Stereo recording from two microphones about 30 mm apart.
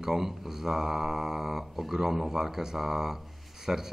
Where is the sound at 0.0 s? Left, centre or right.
Centre.